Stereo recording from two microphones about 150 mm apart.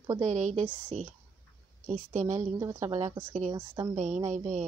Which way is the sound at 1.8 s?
50° right (ahead or behind).